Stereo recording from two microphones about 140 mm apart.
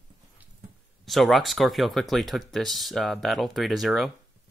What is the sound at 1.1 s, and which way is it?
Speech, centre (ahead or behind).